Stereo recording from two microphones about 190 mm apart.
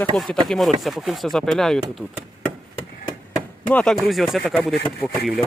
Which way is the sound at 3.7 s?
5° left (ahead or behind).